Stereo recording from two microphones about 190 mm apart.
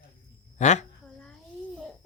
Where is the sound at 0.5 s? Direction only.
40° left (ahead or behind).